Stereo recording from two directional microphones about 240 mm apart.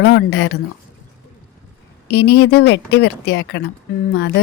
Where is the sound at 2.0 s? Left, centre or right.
Left.